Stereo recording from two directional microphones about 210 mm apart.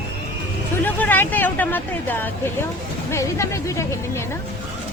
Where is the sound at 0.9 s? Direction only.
10° left (ahead or behind).